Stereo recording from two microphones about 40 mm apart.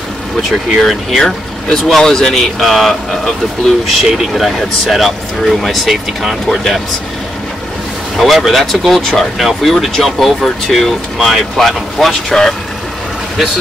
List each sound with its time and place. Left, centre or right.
0.4 s speech: centre
3.3 s speech: centre
8.2 s speech: centre